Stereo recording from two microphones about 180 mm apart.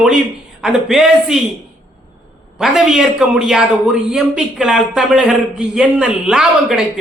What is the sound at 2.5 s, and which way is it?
A man's voice, centre (ahead or behind).